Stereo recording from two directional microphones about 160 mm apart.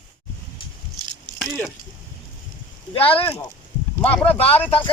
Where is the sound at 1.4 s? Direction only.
5° left (ahead or behind).